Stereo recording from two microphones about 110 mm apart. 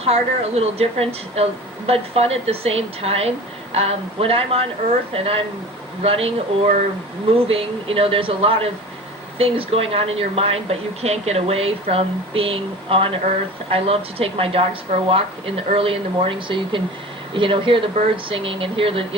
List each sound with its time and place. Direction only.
0.0 s a woman's voice: 70° right (ahead or behind)